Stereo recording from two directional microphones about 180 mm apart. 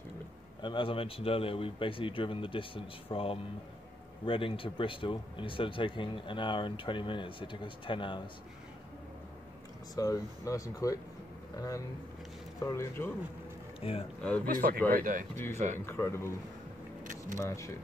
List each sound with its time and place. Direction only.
0.6 s speech: 25° left (ahead or behind)
9.9 s speech: 20° left (ahead or behind)
13.7 s speech: 30° left (ahead or behind)
14.4 s speech: 50° right (ahead or behind)
15.3 s speech: 10° left (ahead or behind)
17.4 s speech: 15° left (ahead or behind)